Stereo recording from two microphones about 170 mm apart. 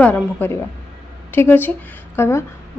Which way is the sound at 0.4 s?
10° left (ahead or behind).